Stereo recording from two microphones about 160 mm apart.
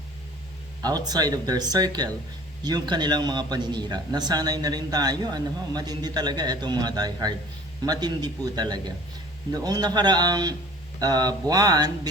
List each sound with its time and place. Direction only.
0.8 s a man's voice: 25° right (ahead or behind)